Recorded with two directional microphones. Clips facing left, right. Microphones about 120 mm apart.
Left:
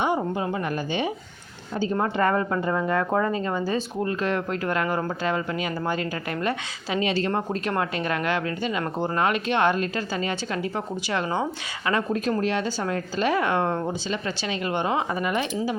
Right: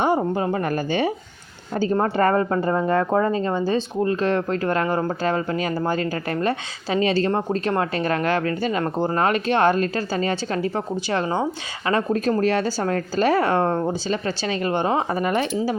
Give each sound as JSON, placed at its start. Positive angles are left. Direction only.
{"t": 0.0, "sound": "a woman's voice", "side_deg": -40}